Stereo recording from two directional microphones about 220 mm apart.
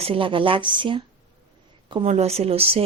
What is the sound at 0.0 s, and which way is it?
Speech, 25° right (ahead or behind).